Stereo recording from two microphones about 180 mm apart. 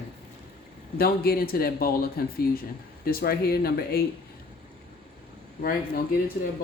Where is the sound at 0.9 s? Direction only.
55° left (ahead or behind).